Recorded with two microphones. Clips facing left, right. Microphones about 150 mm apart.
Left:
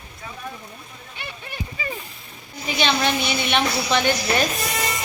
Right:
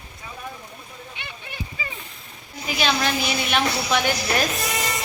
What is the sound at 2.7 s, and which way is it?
A woman's voice, 5° right (ahead or behind).